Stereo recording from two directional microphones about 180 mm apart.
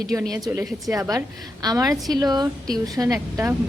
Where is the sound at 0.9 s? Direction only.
20° right (ahead or behind).